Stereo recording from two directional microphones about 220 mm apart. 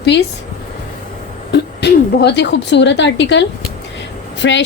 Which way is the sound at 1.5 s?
50° left (ahead or behind).